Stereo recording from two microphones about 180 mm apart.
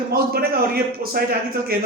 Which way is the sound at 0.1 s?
55° right (ahead or behind).